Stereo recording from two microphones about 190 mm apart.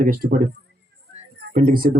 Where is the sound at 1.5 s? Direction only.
50° right (ahead or behind).